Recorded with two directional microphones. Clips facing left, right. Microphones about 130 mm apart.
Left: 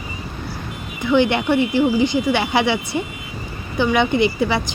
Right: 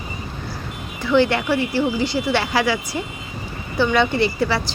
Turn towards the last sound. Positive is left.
turn(degrees=15)  # may be behind; listen again after turning